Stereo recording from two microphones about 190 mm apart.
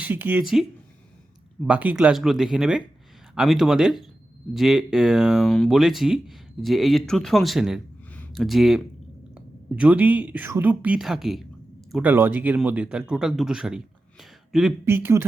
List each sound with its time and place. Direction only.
0.0 s speech: 10° right (ahead or behind)
1.6 s speech: 5° right (ahead or behind)
8.1 s a sound: 5° left (ahead or behind)
9.3 s speech: 5° right (ahead or behind)